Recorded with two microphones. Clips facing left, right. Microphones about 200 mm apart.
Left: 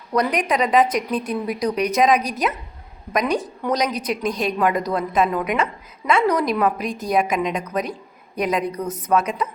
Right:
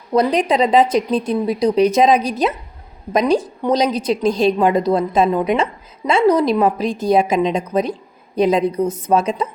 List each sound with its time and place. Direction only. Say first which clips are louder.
0.1 s a woman's voice: right 5 dB; 25° right (ahead or behind)